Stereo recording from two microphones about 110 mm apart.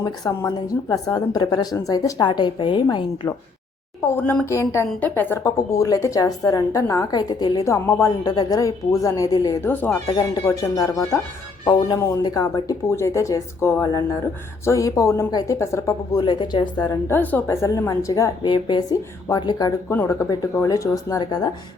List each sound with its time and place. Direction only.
0.0 s a woman's voice: 35° left (ahead or behind)
4.4 s speech: 25° left (ahead or behind)
5.4 s a woman's voice: 30° left (ahead or behind)
9.6 s speech: 15° left (ahead or behind)
10.1 s a woman's voice: 45° left (ahead or behind); by 16.2 s 25° left (ahead or behind)
16.2 s speech: 40° left (ahead or behind)
17.1 s a woman's voice: 20° left (ahead or behind); by 19.7 s 40° left (ahead or behind)
19.9 s a woman's voice: 25° left (ahead or behind)